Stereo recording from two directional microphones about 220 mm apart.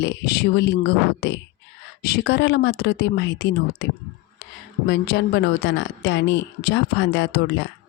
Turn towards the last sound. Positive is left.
turn(degrees=50)  # may be behind; listen again after turning